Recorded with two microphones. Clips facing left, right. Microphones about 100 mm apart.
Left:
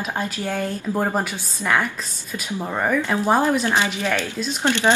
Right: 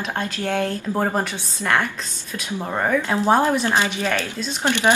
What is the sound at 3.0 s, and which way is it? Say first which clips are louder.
Speech: right 1 dB; 20° right (ahead or behind).